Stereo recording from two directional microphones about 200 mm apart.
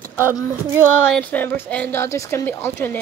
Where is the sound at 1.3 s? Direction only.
10° left (ahead or behind).